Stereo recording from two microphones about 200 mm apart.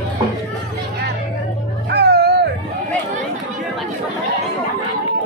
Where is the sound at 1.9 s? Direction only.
55° right (ahead or behind).